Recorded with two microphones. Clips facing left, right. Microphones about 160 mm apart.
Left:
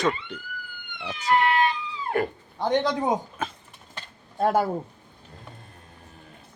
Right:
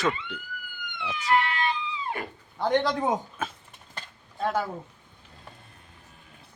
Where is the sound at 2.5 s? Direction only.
20° left (ahead or behind).